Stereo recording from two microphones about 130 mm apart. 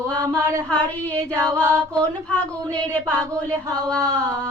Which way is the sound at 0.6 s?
10° left (ahead or behind).